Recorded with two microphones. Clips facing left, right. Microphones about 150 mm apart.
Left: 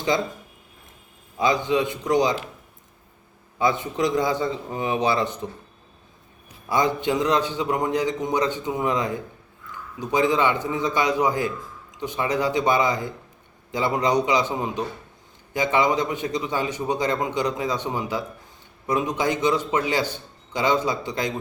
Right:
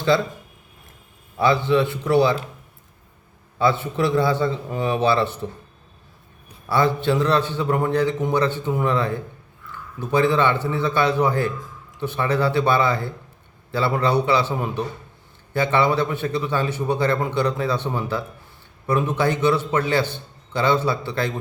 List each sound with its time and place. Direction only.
1.4 s a man's voice: 15° left (ahead or behind)
3.6 s a man's voice: 15° left (ahead or behind)
6.7 s a man's voice: 15° left (ahead or behind)